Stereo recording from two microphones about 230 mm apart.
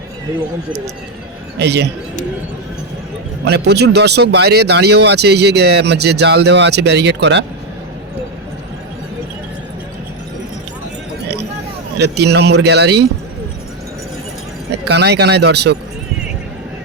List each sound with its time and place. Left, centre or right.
1.5 s speech: right
3.4 s speech: right
11.9 s speech: right
14.8 s speech: right